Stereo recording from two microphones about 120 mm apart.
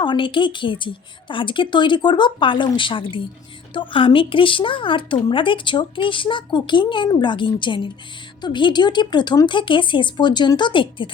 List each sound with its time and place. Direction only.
0.0 s a woman's voice: 40° left (ahead or behind)